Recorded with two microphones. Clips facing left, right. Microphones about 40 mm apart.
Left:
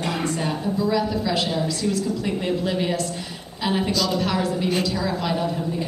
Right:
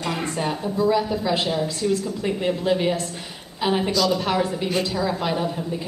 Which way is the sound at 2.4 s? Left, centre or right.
Centre.